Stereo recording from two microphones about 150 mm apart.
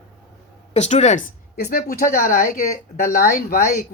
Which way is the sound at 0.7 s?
50° left (ahead or behind).